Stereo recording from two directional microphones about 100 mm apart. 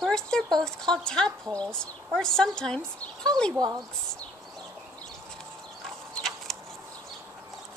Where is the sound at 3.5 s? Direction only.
35° right (ahead or behind).